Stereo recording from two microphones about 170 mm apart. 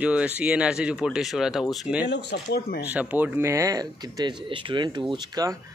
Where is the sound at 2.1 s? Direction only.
75° left (ahead or behind).